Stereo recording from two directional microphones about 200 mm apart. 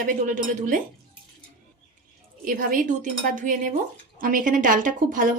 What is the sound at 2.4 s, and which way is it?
A woman's voice, 45° right (ahead or behind).